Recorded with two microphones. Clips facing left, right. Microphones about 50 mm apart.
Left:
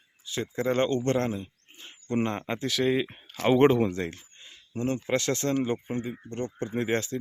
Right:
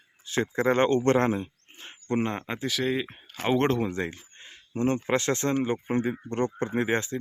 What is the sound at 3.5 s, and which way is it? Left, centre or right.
Speech, centre.